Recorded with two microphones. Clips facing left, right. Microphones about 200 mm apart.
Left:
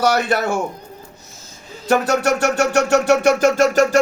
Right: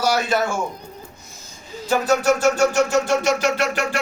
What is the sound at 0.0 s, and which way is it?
Speech, 60° left (ahead or behind).